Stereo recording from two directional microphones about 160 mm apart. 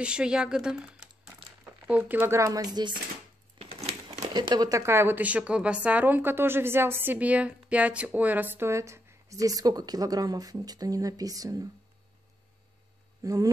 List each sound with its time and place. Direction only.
0.0 s speech: 5° right (ahead or behind); by 3.0 s 25° right (ahead or behind)
3.5 s a sound: 40° right (ahead or behind)
4.2 s speech: 25° right (ahead or behind)
13.2 s speech: 20° right (ahead or behind)